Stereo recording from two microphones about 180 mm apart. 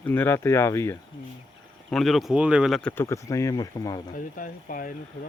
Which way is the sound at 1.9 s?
Centre (ahead or behind).